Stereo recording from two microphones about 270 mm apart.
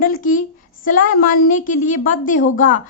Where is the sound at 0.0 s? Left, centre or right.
Left.